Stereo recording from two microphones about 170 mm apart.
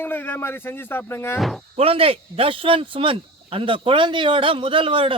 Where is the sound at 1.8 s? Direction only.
35° right (ahead or behind).